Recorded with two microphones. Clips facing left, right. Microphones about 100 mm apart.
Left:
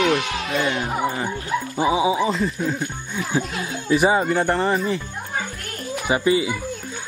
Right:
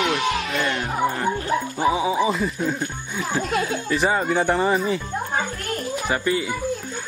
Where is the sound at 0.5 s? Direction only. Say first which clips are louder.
Left 1 dB; 5° left (ahead or behind).